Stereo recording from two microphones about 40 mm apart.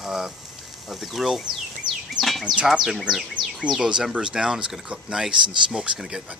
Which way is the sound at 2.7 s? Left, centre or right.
Centre.